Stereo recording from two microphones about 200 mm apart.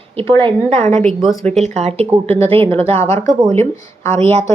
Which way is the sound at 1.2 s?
Centre (ahead or behind).